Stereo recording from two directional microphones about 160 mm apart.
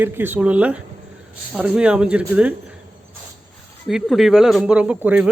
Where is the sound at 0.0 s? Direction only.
10° right (ahead or behind).